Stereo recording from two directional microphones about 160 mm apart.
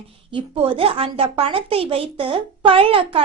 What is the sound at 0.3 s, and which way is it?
A woman's voice, 30° right (ahead or behind).